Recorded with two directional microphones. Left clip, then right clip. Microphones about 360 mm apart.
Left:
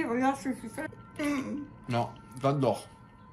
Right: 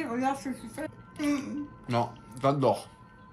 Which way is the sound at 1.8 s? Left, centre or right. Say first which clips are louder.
Right 2 dB; centre.